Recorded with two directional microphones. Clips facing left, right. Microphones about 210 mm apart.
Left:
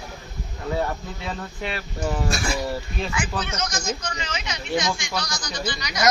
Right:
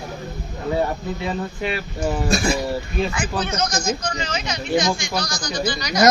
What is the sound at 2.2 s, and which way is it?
Speech, 20° right (ahead or behind).